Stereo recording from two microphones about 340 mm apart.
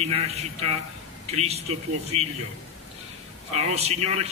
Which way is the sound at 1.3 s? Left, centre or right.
Centre.